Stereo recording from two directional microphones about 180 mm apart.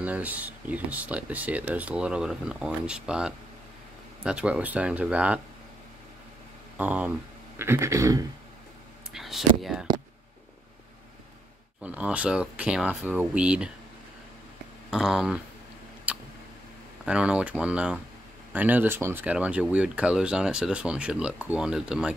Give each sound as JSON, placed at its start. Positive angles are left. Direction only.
{"t": 0.0, "sound": "speech", "side_deg": -10}
{"t": 6.8, "sound": "speech", "side_deg": -10}
{"t": 9.1, "sound": "a sound", "side_deg": 0}
{"t": 9.6, "sound": "speech", "side_deg": 0}
{"t": 11.8, "sound": "speech", "side_deg": -10}
{"t": 14.9, "sound": "speech", "side_deg": -5}
{"t": 16.1, "sound": "vehicle", "side_deg": -10}
{"t": 17.0, "sound": "speech", "side_deg": -5}